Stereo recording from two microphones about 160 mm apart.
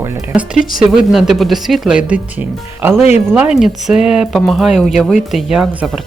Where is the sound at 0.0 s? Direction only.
15° right (ahead or behind).